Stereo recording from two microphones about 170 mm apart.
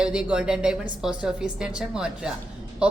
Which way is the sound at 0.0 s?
5° right (ahead or behind).